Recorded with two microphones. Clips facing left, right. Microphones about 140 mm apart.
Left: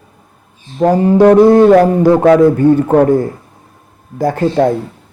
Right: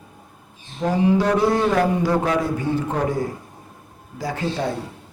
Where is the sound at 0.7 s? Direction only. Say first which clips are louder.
Left 9 dB; 50° left (ahead or behind).